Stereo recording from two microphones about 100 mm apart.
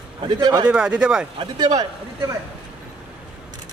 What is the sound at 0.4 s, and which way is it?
Speech, 35° right (ahead or behind).